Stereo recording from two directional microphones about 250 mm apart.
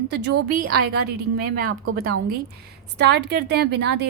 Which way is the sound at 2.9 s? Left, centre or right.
Right.